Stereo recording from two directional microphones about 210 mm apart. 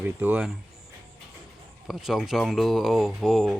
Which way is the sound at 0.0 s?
10° right (ahead or behind).